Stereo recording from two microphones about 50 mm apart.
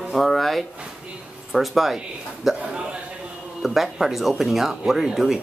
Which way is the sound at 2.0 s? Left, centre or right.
Centre.